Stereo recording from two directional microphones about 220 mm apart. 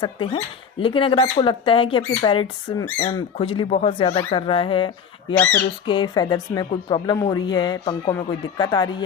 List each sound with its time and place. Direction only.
0.0 s speech: 25° left (ahead or behind)
5.3 s speech: 10° left (ahead or behind)
5.8 s speech: 20° left (ahead or behind)